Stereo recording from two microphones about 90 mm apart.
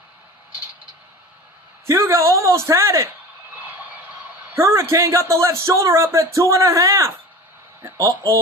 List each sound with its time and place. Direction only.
1.9 s speech: 30° right (ahead or behind)
4.5 s speech: 30° right (ahead or behind)